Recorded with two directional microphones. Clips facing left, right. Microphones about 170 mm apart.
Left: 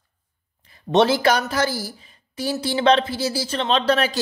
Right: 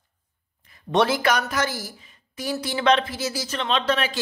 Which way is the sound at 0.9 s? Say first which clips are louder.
Left 4 dB; 25° left (ahead or behind).